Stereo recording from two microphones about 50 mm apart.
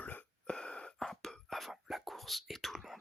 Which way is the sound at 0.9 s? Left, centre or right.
Centre.